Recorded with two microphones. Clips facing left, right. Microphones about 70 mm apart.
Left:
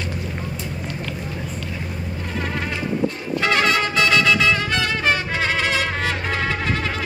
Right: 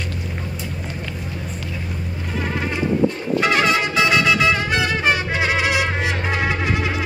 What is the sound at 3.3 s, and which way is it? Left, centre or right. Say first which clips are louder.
Music: even; centre.